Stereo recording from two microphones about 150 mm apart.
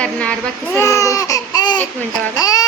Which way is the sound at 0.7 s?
20° left (ahead or behind).